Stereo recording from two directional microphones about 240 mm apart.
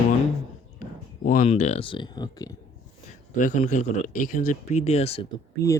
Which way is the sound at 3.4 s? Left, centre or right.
Left.